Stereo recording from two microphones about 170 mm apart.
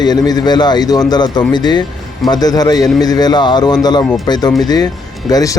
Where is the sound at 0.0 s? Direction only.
25° left (ahead or behind).